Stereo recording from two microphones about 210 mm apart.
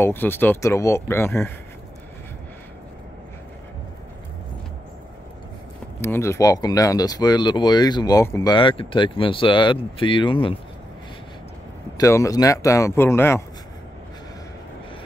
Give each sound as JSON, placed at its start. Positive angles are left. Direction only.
{"t": 0.0, "sound": "speech", "side_deg": 10}
{"t": 5.9, "sound": "speech", "side_deg": 10}
{"t": 12.0, "sound": "speech", "side_deg": 15}